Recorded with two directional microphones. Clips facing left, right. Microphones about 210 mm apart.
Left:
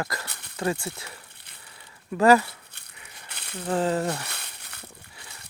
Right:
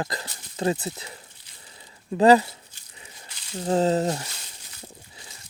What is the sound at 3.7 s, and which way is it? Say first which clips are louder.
Speech: right 3 dB; 25° right (ahead or behind).